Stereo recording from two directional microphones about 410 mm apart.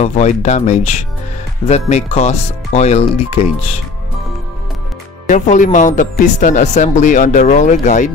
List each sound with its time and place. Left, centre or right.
0.0 s speech: centre
5.3 s speech: centre